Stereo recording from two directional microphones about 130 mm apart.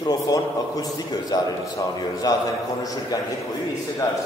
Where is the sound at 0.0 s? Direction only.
30° left (ahead or behind).